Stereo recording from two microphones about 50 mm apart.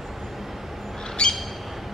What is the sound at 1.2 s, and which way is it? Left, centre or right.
Squawk, centre.